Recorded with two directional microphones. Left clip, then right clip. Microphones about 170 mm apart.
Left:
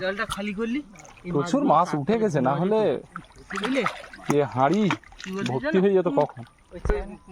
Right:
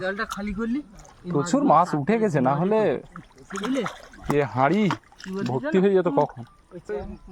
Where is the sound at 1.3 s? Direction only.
25° right (ahead or behind).